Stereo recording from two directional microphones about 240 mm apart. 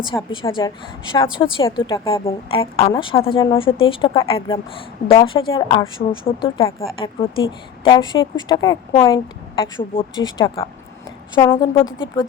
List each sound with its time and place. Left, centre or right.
0.3 s a woman's voice: left